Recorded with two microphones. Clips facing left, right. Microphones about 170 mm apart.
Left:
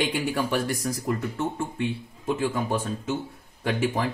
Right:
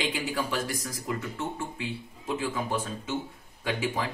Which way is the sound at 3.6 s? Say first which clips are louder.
Left 4 dB; 55° left (ahead or behind).